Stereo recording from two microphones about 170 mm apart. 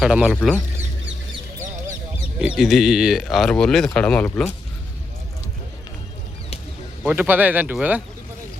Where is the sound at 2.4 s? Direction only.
5° right (ahead or behind).